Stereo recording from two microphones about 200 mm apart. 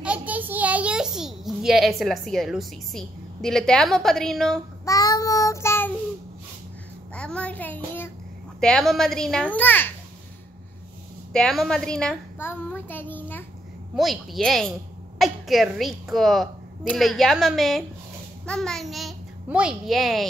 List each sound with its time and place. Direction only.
0.0 s a child's voice: 5° right (ahead or behind)
4.8 s child singing: 15° left (ahead or behind)
7.2 s a child's voice: 5° left (ahead or behind)
11.3 s a child's voice: centre (ahead or behind)
13.9 s a woman's voice: centre (ahead or behind)